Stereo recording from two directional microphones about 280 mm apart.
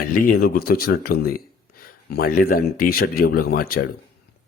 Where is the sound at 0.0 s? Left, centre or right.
Left.